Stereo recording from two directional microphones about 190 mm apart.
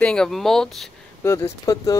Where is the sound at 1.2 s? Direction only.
15° left (ahead or behind).